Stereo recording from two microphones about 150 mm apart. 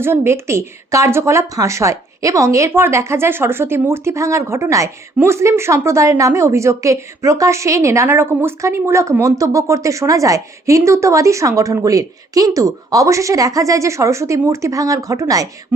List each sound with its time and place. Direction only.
0.0 s a woman's voice: 15° right (ahead or behind)